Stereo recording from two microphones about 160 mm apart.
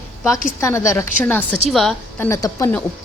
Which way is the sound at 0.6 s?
20° left (ahead or behind).